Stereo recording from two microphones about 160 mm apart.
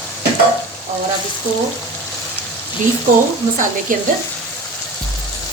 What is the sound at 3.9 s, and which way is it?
Frying, 60° right (ahead or behind).